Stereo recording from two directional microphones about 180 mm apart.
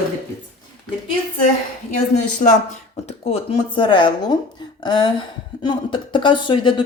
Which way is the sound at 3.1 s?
35° left (ahead or behind).